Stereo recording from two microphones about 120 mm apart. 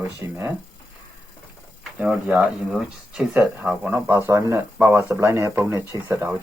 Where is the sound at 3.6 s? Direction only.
15° right (ahead or behind).